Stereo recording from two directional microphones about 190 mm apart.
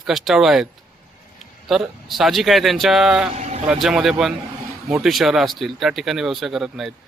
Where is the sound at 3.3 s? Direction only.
35° right (ahead or behind).